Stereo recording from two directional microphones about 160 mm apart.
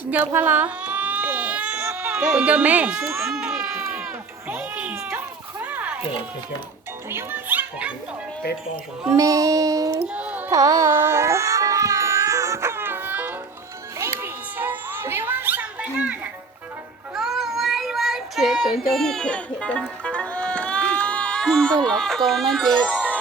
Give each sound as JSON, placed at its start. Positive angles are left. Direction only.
{"t": 0.0, "sound": "baby cry", "side_deg": -10}
{"t": 3.2, "sound": "baby cry", "side_deg": 0}
{"t": 4.4, "sound": "cat", "side_deg": -10}
{"t": 7.1, "sound": "a child's voice", "side_deg": -15}
{"t": 9.0, "sound": "child singing", "side_deg": -20}
{"t": 10.2, "sound": "carnatic music", "side_deg": -10}
{"t": 10.5, "sound": "baby cry", "side_deg": -20}
{"t": 14.0, "sound": "children playing", "side_deg": -15}
{"t": 17.2, "sound": "child singing", "side_deg": 0}
{"t": 20.1, "sound": "music", "side_deg": 5}